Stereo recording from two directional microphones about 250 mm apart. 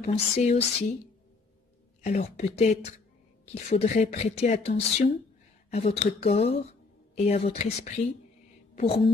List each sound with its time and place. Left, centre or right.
0.0 s speech: left
2.0 s a woman's voice: left